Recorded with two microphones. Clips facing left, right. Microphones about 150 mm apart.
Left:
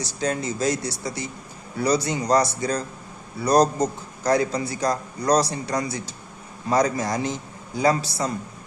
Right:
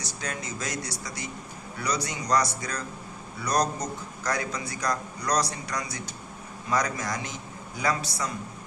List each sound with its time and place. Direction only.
0.0 s a man's voice: 30° left (ahead or behind)